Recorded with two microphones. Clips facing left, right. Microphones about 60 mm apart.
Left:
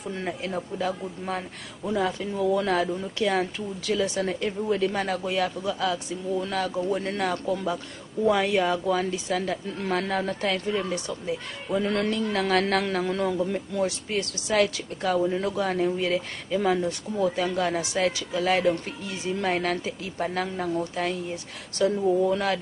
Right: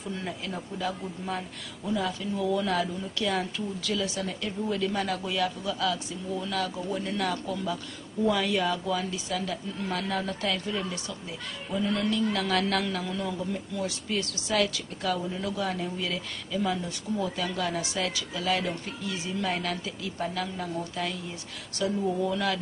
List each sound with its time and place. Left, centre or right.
0.1 s speech: left